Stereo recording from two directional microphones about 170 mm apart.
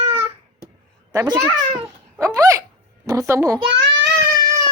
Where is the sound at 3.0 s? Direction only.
20° right (ahead or behind).